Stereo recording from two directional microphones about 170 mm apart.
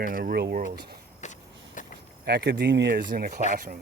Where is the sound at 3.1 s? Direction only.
60° right (ahead or behind).